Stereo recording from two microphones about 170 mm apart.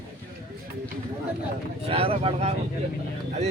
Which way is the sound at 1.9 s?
35° right (ahead or behind).